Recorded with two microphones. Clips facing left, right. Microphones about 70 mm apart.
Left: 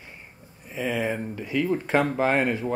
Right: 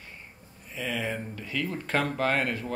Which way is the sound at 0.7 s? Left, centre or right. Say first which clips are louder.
Left 5 dB; centre.